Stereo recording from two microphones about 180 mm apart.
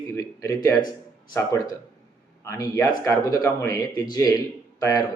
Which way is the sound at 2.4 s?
15° left (ahead or behind).